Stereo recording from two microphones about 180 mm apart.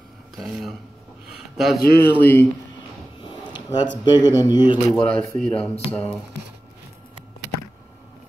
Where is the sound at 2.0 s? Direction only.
10° left (ahead or behind).